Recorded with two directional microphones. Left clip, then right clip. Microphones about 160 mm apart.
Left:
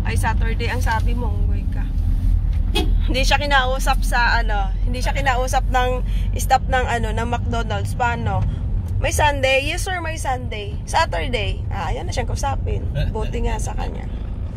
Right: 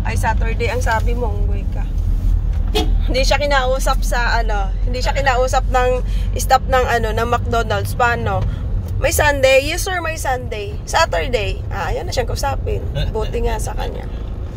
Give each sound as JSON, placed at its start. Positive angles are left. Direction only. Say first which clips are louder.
{"t": 0.0, "sound": "speech", "louder": "right 4 dB", "side_deg": 0}
{"t": 3.1, "sound": "speech", "louder": "right 2 dB", "side_deg": 0}